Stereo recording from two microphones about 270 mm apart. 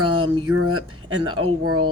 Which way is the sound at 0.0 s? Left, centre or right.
Right.